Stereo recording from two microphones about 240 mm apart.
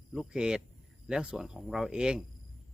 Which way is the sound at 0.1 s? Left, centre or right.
Centre.